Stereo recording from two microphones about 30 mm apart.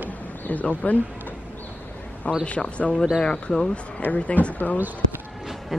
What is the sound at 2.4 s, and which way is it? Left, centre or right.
Speech, left.